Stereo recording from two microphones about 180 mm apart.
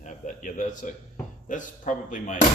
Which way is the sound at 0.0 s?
45° left (ahead or behind).